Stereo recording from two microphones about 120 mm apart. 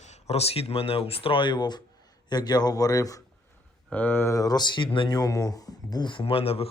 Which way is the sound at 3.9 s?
15° left (ahead or behind).